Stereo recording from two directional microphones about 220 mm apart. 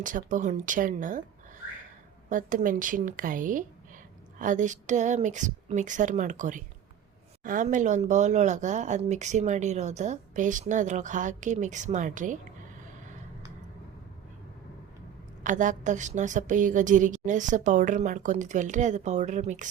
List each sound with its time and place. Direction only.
0.0 s speech: 35° right (ahead or behind)
2.3 s speech: 35° right (ahead or behind)
15.4 s speech: 35° right (ahead or behind)